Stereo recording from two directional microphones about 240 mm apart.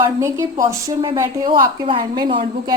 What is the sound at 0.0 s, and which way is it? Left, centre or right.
A woman's voice, centre.